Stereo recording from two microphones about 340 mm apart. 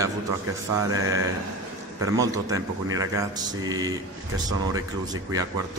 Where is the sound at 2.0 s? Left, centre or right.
Centre.